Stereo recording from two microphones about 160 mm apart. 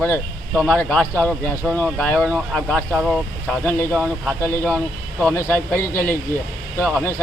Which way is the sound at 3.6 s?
15° left (ahead or behind).